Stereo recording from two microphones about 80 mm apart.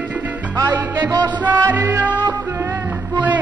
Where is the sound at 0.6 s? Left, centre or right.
Right.